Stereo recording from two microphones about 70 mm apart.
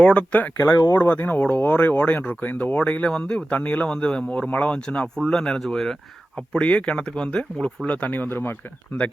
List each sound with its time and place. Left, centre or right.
0.0 s speech: centre